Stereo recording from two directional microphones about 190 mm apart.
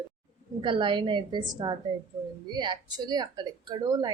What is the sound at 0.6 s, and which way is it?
Speech, 25° right (ahead or behind).